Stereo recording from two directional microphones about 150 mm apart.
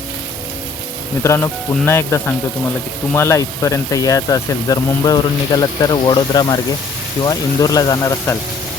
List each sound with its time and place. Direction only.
1.2 s speech: 20° left (ahead or behind)